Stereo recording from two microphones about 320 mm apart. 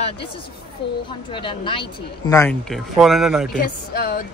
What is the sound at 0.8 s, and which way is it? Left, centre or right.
Speech, left.